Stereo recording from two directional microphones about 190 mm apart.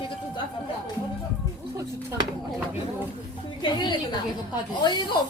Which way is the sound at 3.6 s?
25° left (ahead or behind).